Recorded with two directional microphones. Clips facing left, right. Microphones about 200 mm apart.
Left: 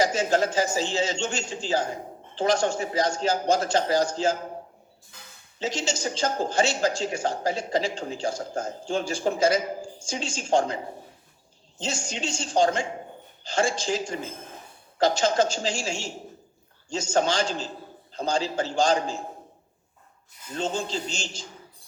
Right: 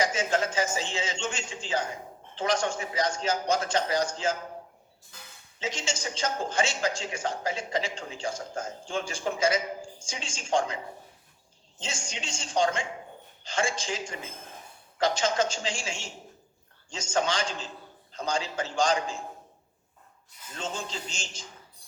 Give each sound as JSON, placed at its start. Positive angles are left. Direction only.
{"t": 0.0, "sound": "speech", "side_deg": 35}
{"t": 5.5, "sound": "speech", "side_deg": 35}
{"t": 11.8, "sound": "speech", "side_deg": 35}
{"t": 20.6, "sound": "speech", "side_deg": 30}